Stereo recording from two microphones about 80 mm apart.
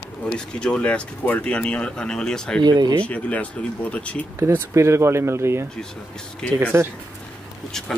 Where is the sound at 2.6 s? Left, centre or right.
Right.